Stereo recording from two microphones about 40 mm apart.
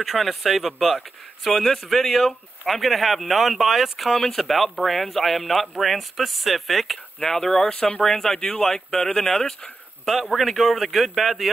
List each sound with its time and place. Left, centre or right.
0.0 s speech: centre
4.1 s speech: centre
8.4 s speech: left
8.6 s speech: centre
10.0 s speech: centre